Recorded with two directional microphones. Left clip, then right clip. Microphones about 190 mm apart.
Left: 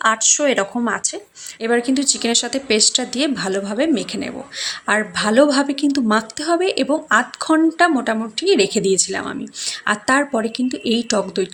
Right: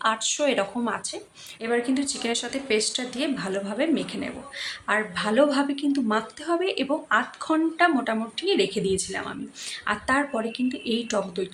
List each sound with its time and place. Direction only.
0.0 s speech: 25° left (ahead or behind)